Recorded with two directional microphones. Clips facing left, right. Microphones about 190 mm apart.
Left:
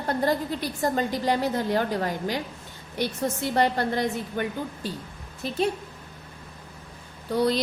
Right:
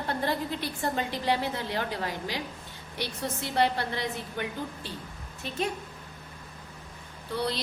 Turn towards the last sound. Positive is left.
turn(degrees=45)  # may be behind; listen again after turning